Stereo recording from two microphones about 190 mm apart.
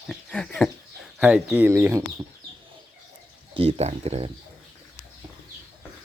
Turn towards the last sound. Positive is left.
turn(degrees=-30)  # may be behind; listen again after turning